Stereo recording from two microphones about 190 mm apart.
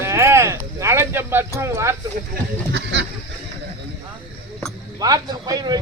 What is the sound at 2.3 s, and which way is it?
Speech, 65° right (ahead or behind).